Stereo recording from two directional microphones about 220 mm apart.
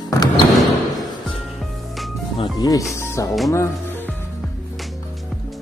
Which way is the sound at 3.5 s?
15° left (ahead or behind).